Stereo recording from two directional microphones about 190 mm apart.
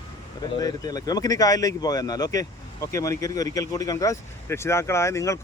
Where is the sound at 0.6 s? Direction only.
20° left (ahead or behind).